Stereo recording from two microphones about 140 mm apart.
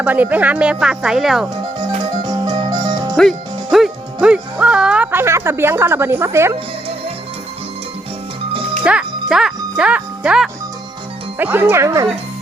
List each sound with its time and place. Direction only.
0.0 s speech: 10° right (ahead or behind)
2.2 s music: 30° right (ahead or behind)
3.2 s speech: centre (ahead or behind)
5.2 s speech: 20° right (ahead or behind)
8.8 s music: 5° right (ahead or behind)
11.3 s speech: 15° right (ahead or behind)